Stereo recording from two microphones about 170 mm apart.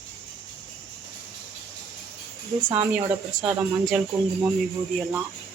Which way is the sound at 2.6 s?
10° right (ahead or behind).